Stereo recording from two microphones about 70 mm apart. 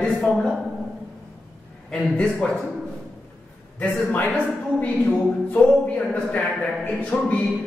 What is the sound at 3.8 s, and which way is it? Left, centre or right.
A man's voice, left.